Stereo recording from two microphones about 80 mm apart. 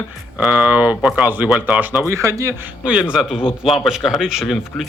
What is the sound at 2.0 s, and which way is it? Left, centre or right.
Speech, right.